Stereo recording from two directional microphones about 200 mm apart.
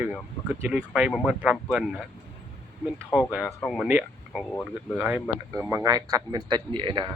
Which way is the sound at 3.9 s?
10° right (ahead or behind).